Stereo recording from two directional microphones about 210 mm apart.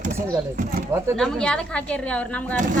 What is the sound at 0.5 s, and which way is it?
Speech, 40° right (ahead or behind).